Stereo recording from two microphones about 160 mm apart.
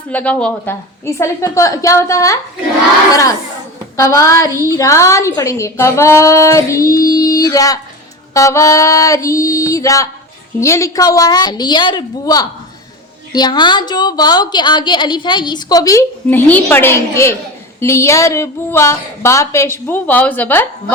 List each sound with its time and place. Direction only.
0.1 s a woman's voice: 10° left (ahead or behind)